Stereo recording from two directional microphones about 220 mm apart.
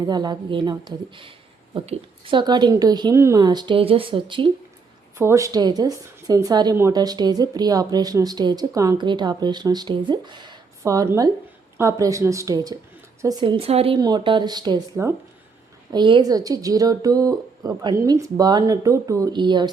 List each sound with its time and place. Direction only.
0.0 s a woman's voice: 20° right (ahead or behind)
5.1 s a woman's voice: 10° right (ahead or behind)